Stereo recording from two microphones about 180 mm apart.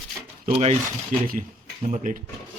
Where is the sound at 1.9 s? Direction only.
45° right (ahead or behind).